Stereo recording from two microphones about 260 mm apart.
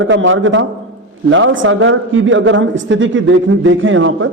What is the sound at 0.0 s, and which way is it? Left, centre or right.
A man's voice, right.